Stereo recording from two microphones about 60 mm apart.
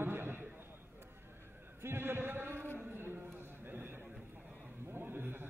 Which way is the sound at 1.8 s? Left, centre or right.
Right.